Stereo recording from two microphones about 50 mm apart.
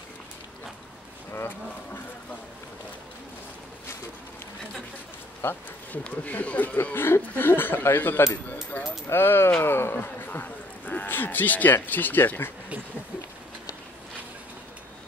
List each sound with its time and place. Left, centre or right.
5.4 s speech: left
6.0 s speech: left
6.8 s speech: left
9.1 s speech: left
9.9 s speech: left